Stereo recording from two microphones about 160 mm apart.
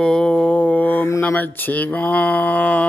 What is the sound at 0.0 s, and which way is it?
Mantra, 5° left (ahead or behind).